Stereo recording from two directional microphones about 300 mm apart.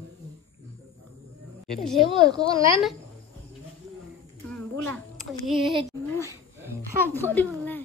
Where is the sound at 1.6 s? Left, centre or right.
Centre.